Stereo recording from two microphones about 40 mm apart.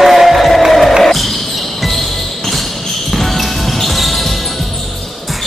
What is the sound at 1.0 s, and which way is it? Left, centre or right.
Basketball bounce, centre.